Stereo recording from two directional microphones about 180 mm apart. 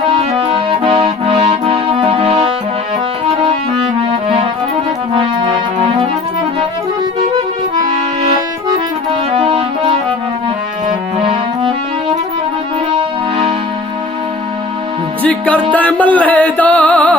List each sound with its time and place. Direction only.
0.2 s accordion: 30° right (ahead or behind)
5.1 s music: 30° right (ahead or behind)
9.3 s music: 30° right (ahead or behind)
11.2 s music: 30° right (ahead or behind)
15.2 s music: 5° left (ahead or behind)